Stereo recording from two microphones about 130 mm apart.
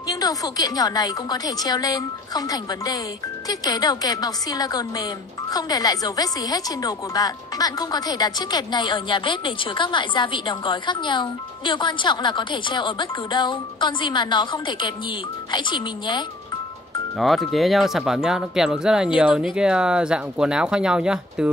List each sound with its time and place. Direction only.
0.0 s a woman's voice: 30° left (ahead or behind)
17.5 s speech: centre (ahead or behind)